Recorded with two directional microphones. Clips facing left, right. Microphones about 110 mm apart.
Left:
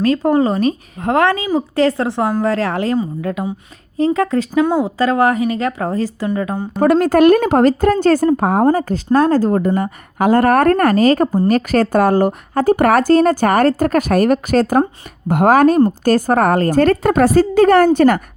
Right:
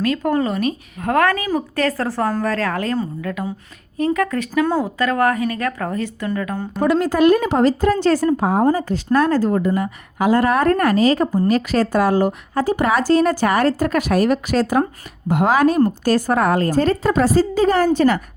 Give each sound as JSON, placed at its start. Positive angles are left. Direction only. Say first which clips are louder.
{"t": 0.0, "sound": "a woman's voice", "louder": "left 5 dB", "side_deg": 30}
{"t": 6.8, "sound": "speech", "louder": "left 4 dB", "side_deg": 55}
{"t": 9.1, "sound": "a woman's voice", "louder": "left 3 dB", "side_deg": 40}